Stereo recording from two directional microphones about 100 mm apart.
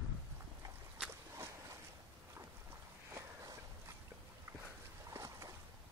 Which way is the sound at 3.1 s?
30° right (ahead or behind).